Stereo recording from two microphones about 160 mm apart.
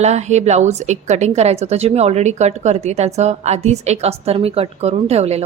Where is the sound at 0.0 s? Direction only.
45° right (ahead or behind).